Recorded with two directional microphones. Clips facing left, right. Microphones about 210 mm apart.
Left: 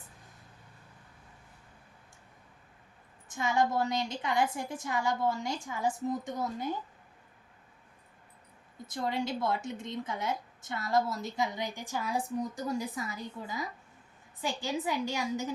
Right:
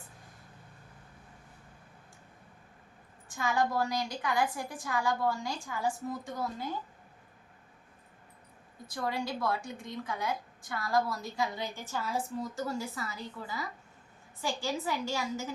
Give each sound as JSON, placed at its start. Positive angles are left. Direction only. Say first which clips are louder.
{"t": 3.2, "sound": "a woman's voice", "louder": "left 1 dB", "side_deg": 20}
{"t": 8.9, "sound": "a woman's voice", "louder": "left 2 dB", "side_deg": 20}